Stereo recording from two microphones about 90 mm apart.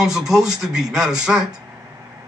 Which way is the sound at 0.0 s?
5° right (ahead or behind).